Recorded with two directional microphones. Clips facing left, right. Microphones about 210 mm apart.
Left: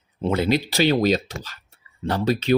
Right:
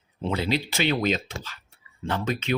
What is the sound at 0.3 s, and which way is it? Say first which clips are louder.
Speech: left 5 dB; 50° left (ahead or behind).